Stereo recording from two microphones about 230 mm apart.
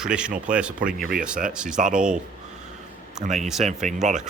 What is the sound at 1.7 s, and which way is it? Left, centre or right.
Speech, right.